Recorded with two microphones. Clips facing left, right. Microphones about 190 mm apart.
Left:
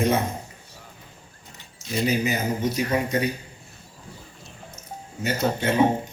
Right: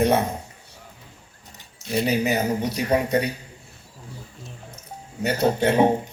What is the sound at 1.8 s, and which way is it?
Speech, 60° right (ahead or behind).